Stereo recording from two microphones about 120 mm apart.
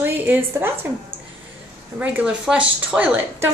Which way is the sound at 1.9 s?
10° right (ahead or behind).